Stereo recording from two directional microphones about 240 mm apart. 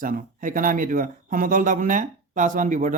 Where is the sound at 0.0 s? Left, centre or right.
Right.